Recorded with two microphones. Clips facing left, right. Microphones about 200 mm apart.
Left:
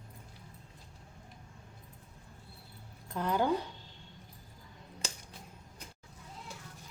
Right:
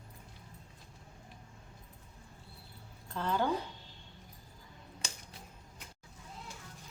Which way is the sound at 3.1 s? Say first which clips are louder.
Left 2 dB; 15° left (ahead or behind).